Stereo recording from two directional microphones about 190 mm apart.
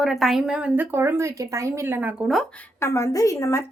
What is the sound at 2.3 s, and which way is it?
Speech, centre (ahead or behind).